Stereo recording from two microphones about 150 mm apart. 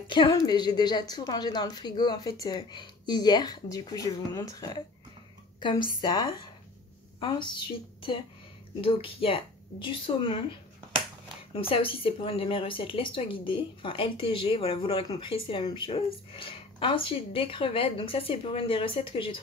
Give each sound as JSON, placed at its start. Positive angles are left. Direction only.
{"t": 0.1, "sound": "a woman's voice", "side_deg": 30}
{"t": 8.8, "sound": "a woman's voice", "side_deg": 35}
{"t": 11.5, "sound": "a woman's voice", "side_deg": 35}